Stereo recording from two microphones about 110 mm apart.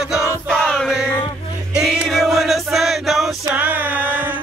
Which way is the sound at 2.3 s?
Centre (ahead or behind).